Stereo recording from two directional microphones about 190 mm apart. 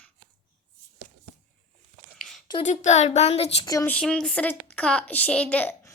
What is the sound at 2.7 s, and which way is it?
Speech, 35° left (ahead or behind).